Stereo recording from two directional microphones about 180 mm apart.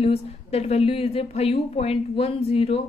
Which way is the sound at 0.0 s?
35° left (ahead or behind).